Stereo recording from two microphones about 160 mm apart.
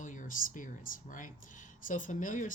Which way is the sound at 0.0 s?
50° left (ahead or behind).